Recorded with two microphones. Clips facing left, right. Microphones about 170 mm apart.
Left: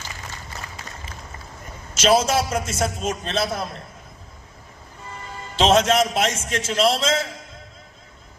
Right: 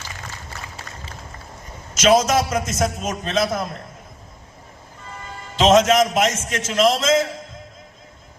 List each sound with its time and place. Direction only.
2.0 s a man's voice: 30° left (ahead or behind)
5.5 s a man's voice: 30° left (ahead or behind)